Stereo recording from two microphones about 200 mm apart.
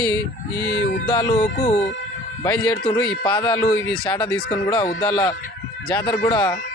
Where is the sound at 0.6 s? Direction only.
65° left (ahead or behind).